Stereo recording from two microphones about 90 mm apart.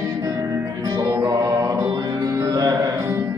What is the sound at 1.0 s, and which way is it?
Music, 35° right (ahead or behind).